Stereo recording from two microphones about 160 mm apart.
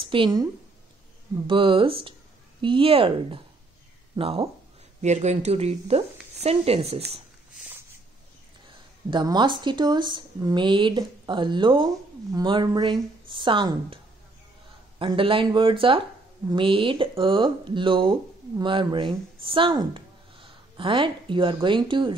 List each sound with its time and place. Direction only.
0.0 s speech: 30° right (ahead or behind)
1.5 s speech: 35° right (ahead or behind)
5.0 s speech: 45° right (ahead or behind)
9.1 s speech: 25° right (ahead or behind)
15.0 s speech: 35° right (ahead or behind)